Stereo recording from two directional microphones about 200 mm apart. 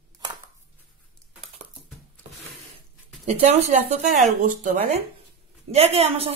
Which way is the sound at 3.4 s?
35° right (ahead or behind).